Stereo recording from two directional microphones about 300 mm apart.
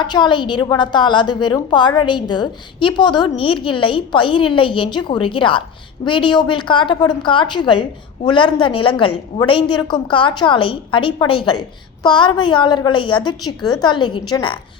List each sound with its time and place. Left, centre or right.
0.0 s a woman's voice: centre